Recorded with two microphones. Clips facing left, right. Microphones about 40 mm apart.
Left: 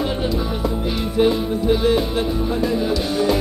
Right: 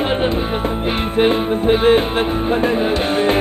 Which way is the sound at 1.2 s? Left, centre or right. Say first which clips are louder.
Right 2 dB; right.